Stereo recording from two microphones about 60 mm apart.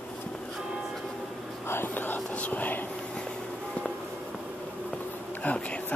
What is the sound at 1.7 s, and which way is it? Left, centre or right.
Speech, left.